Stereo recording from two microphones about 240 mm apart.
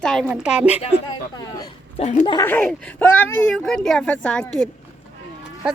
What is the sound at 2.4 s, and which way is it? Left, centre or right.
Speech, centre.